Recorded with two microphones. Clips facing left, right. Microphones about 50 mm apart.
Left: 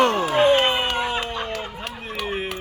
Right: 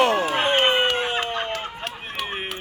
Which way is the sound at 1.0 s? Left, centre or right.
Right.